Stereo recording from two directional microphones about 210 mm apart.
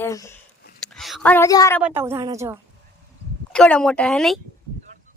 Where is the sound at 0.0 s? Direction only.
15° left (ahead or behind).